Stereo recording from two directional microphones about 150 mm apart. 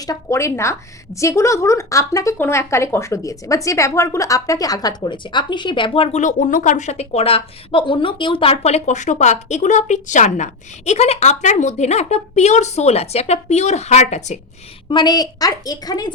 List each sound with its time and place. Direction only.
0.0 s a woman's voice: 20° left (ahead or behind); by 14.3 s 50° left (ahead or behind)
14.8 s a woman's voice: 30° left (ahead or behind)